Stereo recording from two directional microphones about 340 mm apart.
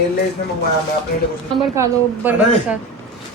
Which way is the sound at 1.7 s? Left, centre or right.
Centre.